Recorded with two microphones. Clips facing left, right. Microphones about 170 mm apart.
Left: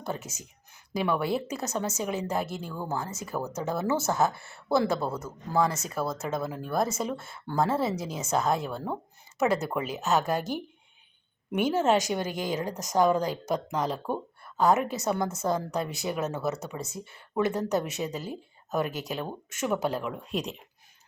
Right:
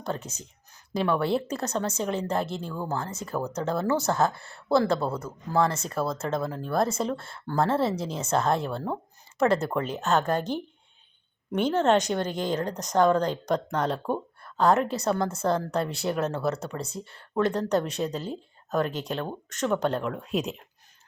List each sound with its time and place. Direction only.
0.1 s speech: 5° left (ahead or behind)
4.3 s speech: 25° left (ahead or behind)
4.9 s speech: centre (ahead or behind)
11.5 s speech: 5° left (ahead or behind)
15.1 s speech: 20° left (ahead or behind)
15.4 s speech: centre (ahead or behind)